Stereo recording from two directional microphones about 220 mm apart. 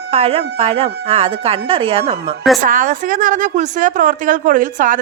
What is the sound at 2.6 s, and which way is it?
A woman's voice, 35° right (ahead or behind).